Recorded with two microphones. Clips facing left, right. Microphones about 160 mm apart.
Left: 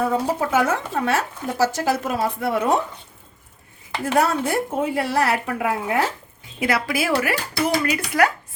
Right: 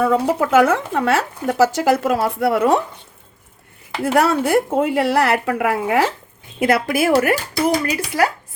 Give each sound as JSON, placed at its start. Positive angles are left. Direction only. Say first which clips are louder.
{"t": 0.0, "sound": "speech", "louder": "right 4 dB", "side_deg": -80}
{"t": 4.0, "sound": "speech", "louder": "right 4 dB", "side_deg": -90}
{"t": 6.6, "sound": "speech", "louder": "right 5 dB", "side_deg": -50}
{"t": 7.9, "sound": "speech", "louder": "right 1 dB", "side_deg": -30}